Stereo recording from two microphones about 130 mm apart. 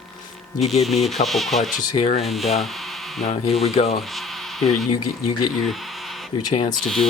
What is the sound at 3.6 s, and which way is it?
Speech, 55° left (ahead or behind).